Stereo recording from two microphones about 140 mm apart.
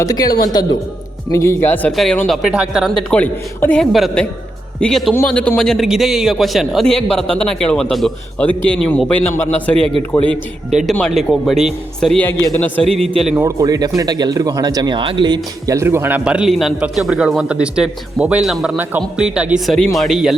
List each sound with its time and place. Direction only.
0.0 s a woman's voice: 25° left (ahead or behind)
2.2 s a man's voice: centre (ahead or behind)
3.2 s a man's voice: 10° left (ahead or behind)
10.7 s a man's voice: centre (ahead or behind)
13.4 s a man's voice: 25° right (ahead or behind); by 20.3 s centre (ahead or behind)